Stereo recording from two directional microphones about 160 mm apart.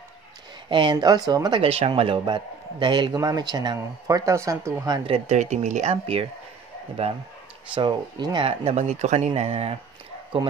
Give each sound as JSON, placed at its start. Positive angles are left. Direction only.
{"t": 0.7, "sound": "speech", "side_deg": -30}
{"t": 7.7, "sound": "speech", "side_deg": -30}
{"t": 8.5, "sound": "speech", "side_deg": -45}